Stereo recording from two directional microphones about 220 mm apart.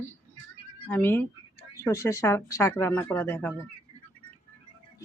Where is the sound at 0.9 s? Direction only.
10° left (ahead or behind).